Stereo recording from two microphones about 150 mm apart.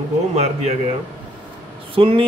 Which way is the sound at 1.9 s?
40° right (ahead or behind).